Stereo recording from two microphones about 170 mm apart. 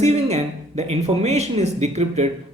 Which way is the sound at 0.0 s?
40° right (ahead or behind).